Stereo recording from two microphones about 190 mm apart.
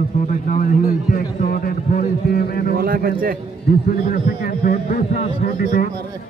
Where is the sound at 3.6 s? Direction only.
50° left (ahead or behind).